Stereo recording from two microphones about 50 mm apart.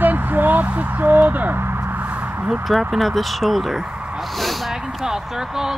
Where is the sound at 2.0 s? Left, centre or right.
Right.